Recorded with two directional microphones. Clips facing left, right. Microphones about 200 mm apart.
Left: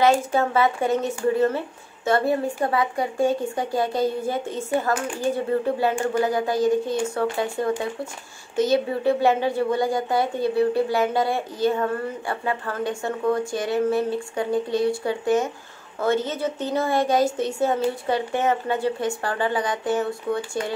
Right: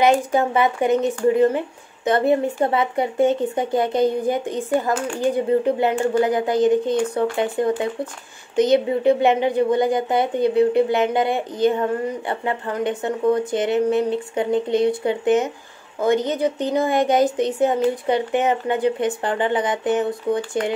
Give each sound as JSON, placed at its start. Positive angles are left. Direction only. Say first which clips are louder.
{"t": 0.0, "sound": "speech", "louder": "right 2 dB", "side_deg": -15}